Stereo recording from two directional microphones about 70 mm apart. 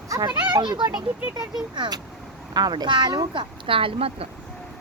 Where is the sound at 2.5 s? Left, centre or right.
Right.